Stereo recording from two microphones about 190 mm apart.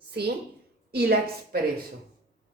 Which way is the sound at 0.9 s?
55° right (ahead or behind).